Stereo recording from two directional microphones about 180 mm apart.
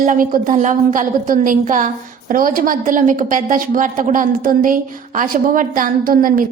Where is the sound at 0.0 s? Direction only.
50° right (ahead or behind).